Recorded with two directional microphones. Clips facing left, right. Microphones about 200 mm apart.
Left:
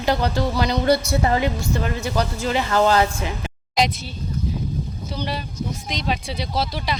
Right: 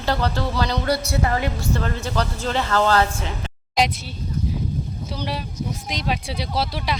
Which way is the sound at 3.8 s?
5° right (ahead or behind).